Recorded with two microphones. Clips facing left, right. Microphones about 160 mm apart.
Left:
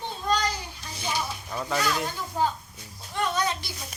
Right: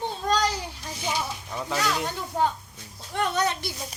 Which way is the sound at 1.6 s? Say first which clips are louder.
Even; 10° right (ahead or behind).